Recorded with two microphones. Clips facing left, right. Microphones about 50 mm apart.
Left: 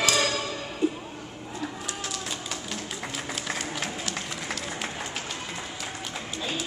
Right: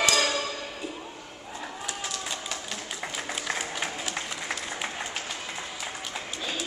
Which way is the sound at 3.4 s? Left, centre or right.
Centre.